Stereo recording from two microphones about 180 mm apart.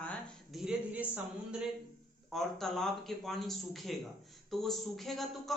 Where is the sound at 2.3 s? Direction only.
Centre (ahead or behind).